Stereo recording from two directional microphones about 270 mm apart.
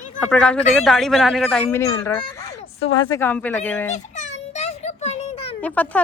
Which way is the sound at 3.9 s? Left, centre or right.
Left.